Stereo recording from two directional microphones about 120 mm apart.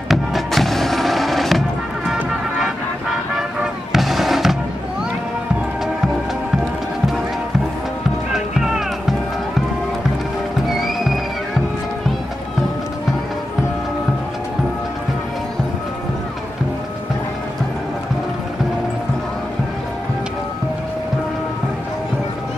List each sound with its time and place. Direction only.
0.1 s music: centre (ahead or behind)
8.3 s music: 5° right (ahead or behind)
10.7 s music: centre (ahead or behind)